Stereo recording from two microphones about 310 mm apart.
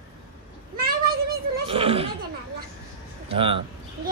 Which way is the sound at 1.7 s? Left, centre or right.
Centre.